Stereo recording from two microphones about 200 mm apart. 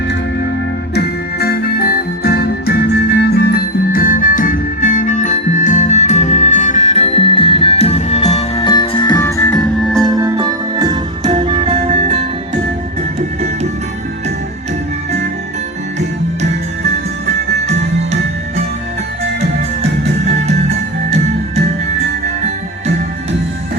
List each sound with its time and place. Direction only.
0.9 s music: 50° left (ahead or behind); by 9.6 s 15° left (ahead or behind)
9.8 s music: 5° left (ahead or behind)
10.2 s music: 20° right (ahead or behind); by 12.2 s 35° right (ahead or behind)